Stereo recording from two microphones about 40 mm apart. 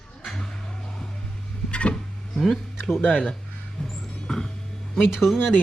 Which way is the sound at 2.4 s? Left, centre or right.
Centre.